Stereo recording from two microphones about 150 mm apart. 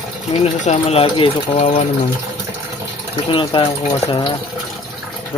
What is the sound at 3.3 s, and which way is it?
Speech, 35° left (ahead or behind).